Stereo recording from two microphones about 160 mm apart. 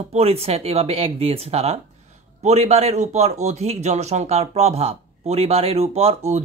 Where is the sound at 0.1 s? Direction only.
40° right (ahead or behind).